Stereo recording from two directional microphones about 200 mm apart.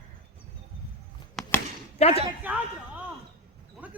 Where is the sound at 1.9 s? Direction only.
30° left (ahead or behind).